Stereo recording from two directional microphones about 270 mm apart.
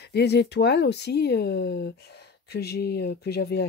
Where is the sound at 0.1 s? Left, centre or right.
Left.